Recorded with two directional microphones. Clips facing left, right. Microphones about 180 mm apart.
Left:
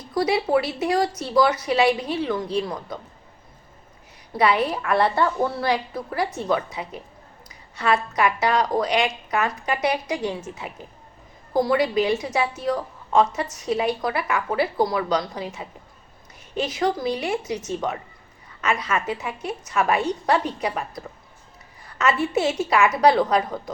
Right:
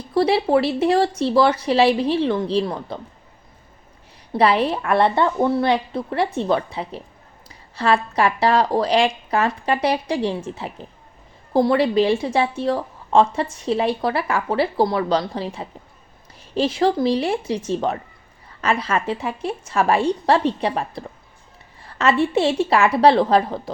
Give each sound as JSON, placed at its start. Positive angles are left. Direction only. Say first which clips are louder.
{"t": 0.1, "sound": "a woman's voice", "louder": "right 4 dB", "side_deg": -30}
{"t": 4.3, "sound": "a woman's voice", "louder": "right 3 dB", "side_deg": -30}